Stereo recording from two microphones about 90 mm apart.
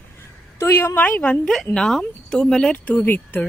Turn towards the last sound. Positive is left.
turn(degrees=20)  # may be behind; listen again after turning